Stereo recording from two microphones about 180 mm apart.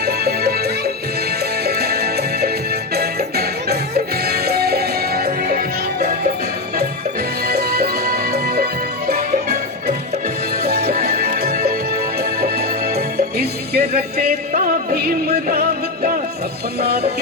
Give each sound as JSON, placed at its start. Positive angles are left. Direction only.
{"t": 0.0, "sound": "music", "side_deg": -60}
{"t": 7.4, "sound": "music", "side_deg": -60}